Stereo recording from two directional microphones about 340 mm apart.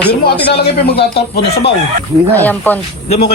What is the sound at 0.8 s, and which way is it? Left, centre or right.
Speech, left.